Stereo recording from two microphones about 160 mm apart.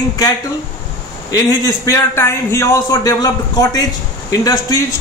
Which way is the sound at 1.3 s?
20° left (ahead or behind).